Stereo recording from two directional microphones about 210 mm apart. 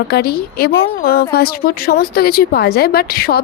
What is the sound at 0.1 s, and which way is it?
A woman's voice, 45° left (ahead or behind).